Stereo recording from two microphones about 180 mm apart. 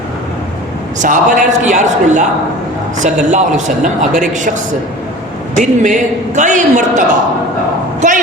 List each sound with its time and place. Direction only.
0.9 s a man's voice: 45° right (ahead or behind)
5.5 s a man's voice: 45° right (ahead or behind)
8.0 s speech: 40° right (ahead or behind)